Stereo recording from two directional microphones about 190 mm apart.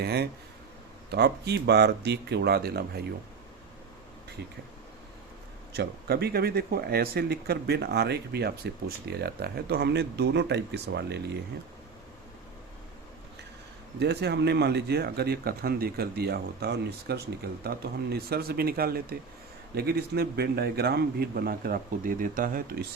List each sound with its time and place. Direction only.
0.0 s speech: 55° right (ahead or behind)
5.7 s speech: 55° right (ahead or behind)
14.0 s speech: 60° right (ahead or behind)